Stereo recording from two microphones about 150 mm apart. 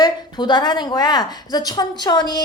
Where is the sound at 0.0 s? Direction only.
30° left (ahead or behind).